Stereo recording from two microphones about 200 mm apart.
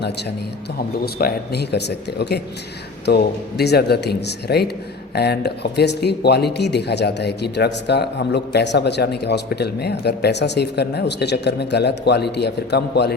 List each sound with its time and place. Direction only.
0.0 s speech: 55° left (ahead or behind)